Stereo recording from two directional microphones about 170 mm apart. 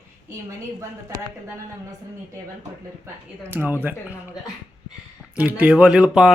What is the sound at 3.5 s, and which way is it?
Speech, 10° right (ahead or behind).